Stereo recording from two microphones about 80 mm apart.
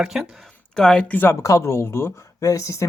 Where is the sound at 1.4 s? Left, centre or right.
Left.